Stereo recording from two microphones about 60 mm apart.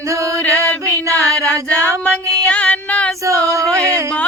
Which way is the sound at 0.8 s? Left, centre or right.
Right.